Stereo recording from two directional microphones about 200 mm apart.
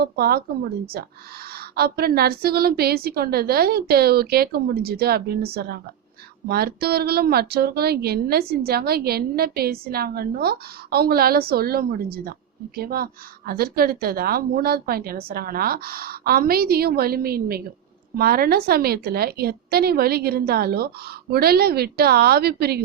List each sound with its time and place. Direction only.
0.0 s speech: 50° right (ahead or behind)
1.7 s speech: 50° right (ahead or behind)